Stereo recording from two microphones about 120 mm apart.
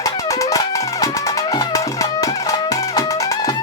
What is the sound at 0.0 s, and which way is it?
Music, 25° left (ahead or behind).